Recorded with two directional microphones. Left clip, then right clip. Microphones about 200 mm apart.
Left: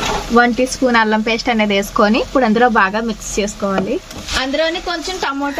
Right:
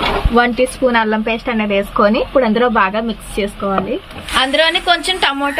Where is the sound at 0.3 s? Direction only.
40° left (ahead or behind).